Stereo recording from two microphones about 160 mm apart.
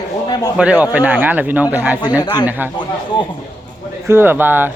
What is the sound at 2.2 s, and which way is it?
Speech, 25° left (ahead or behind).